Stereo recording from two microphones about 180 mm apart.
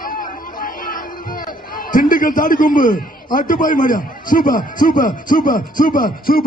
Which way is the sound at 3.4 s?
50° left (ahead or behind).